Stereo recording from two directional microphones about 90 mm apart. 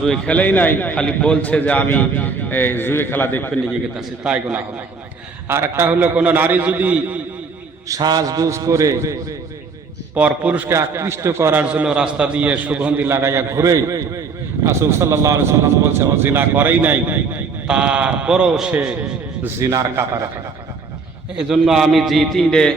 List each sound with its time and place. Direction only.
0.0 s a man's voice: 5° left (ahead or behind)
0.3 s a man's voice: 20° left (ahead or behind)
3.9 s a man's voice: 10° right (ahead or behind)
5.5 s a man's voice: 30° right (ahead or behind)
7.9 s a man's voice: 45° right (ahead or behind)
10.2 s a man's voice: 15° right (ahead or behind)
10.7 s a man's voice: 30° right (ahead or behind)
11.6 s a man's voice: 15° right (ahead or behind)
13.1 s a man's voice: 30° right (ahead or behind)
17.7 s a man's voice: 10° right (ahead or behind)
19.4 s a man's voice: 30° right (ahead or behind)
21.3 s a man's voice: 5° right (ahead or behind)